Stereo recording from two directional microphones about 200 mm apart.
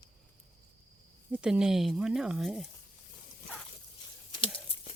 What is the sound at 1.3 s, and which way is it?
Speech, 5° right (ahead or behind).